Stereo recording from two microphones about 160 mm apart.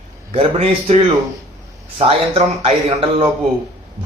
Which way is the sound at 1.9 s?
35° right (ahead or behind).